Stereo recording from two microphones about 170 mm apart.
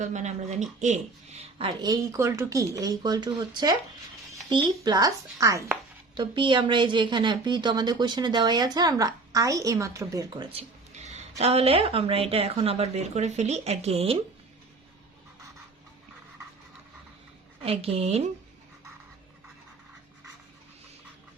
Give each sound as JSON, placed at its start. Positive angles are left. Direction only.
{"t": 0.0, "sound": "a woman's voice", "side_deg": -45}
{"t": 6.1, "sound": "a woman's voice", "side_deg": -30}
{"t": 17.6, "sound": "speech", "side_deg": -35}